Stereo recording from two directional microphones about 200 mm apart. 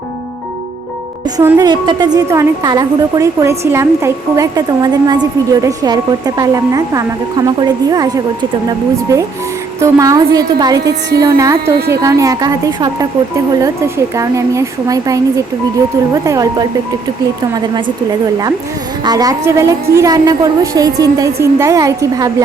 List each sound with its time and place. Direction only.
1.5 s a woman's voice: 20° right (ahead or behind)
9.8 s a woman's voice: 15° right (ahead or behind)
19.0 s speech: 20° right (ahead or behind)